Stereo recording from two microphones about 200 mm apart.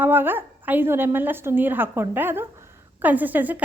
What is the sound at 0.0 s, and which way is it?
A woman's voice, 10° right (ahead or behind).